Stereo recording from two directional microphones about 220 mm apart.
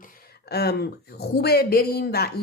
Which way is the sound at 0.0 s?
40° left (ahead or behind).